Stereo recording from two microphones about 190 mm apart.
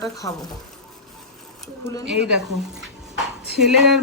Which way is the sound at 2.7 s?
Centre (ahead or behind).